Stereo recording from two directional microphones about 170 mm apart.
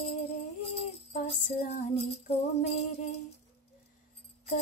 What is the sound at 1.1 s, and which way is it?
Child singing, 40° left (ahead or behind).